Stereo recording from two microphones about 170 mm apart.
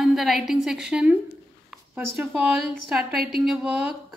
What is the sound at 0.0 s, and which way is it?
A woman's voice, centre (ahead or behind).